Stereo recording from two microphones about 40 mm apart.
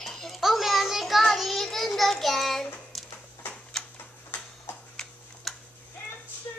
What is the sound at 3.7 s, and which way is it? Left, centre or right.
Tick-tock, centre.